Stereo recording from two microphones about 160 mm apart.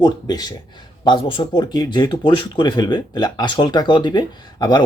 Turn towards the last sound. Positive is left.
turn(degrees=25)  # may be behind; listen again after turning